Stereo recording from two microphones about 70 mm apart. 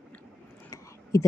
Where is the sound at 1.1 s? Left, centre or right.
Left.